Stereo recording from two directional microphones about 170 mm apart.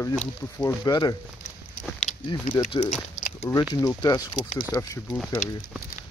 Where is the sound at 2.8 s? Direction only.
25° left (ahead or behind).